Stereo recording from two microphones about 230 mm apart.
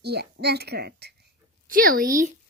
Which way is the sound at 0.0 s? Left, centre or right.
Right.